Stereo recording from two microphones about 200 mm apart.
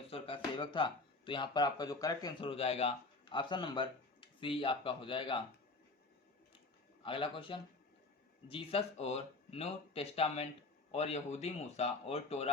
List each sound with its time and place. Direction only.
0.1 s speech: 25° left (ahead or behind)
7.0 s a man's voice: 25° left (ahead or behind)